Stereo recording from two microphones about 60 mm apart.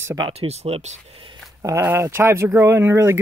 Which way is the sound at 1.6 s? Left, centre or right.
Right.